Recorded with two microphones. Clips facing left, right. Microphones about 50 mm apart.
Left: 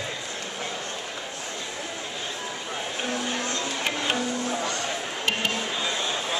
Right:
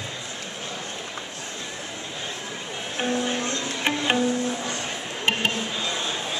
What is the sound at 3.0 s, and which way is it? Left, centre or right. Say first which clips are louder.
Music: right 5 dB; right.